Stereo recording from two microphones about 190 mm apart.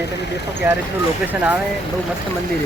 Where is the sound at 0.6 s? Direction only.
15° right (ahead or behind).